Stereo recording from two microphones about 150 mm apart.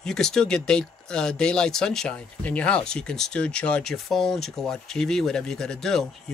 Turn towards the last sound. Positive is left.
turn(degrees=0)  # may be behind; listen again after turning